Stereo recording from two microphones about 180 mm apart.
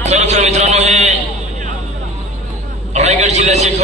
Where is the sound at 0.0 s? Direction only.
35° right (ahead or behind).